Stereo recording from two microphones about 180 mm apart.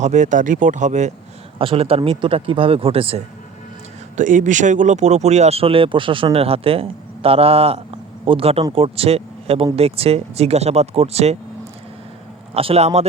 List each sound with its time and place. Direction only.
0.0 s speech: 40° right (ahead or behind)
4.2 s speech: 45° right (ahead or behind)
12.5 s speech: 35° right (ahead or behind)